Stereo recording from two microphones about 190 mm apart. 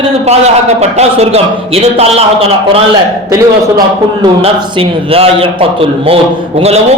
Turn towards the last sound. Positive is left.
turn(degrees=-35)  # may be behind; listen again after turning